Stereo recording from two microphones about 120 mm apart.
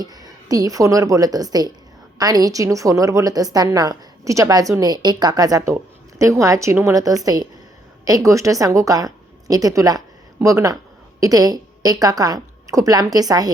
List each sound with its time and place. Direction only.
0.0 s a woman's voice: 35° right (ahead or behind)